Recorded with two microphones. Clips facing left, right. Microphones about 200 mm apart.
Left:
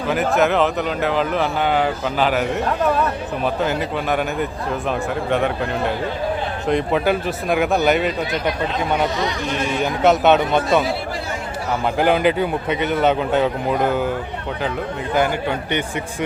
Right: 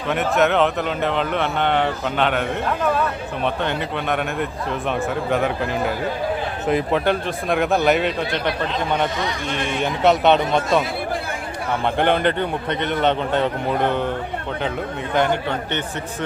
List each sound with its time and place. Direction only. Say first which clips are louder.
0.1 s speech: left 1 dB; centre (ahead or behind)
9.7 s speech: left 1 dB; centre (ahead or behind)
11.9 s speech: left 3 dB; 5° left (ahead or behind)
15.1 s a man's voice: even; 5° left (ahead or behind)